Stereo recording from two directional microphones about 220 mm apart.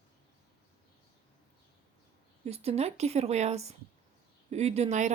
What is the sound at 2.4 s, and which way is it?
A woman's voice, 25° right (ahead or behind).